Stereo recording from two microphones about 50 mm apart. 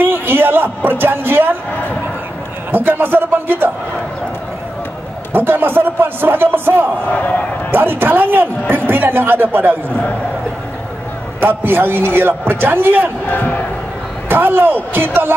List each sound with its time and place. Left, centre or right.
0.0 s a man's voice: right
2.7 s a man's voice: right
5.3 s a man's voice: right
7.1 s speech: left
7.7 s a man's voice: right
11.4 s a man's voice: right
13.3 s speech: left
14.3 s a man's voice: right